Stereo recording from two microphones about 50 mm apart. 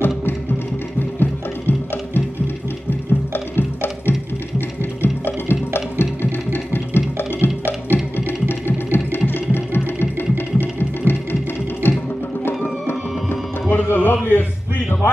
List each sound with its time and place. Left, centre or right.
1.2 s music: left
3.3 s wood block: left
4.6 s music: left